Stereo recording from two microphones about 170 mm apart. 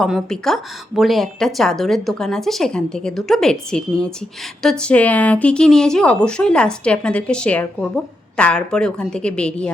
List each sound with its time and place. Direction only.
0.0 s speech: centre (ahead or behind)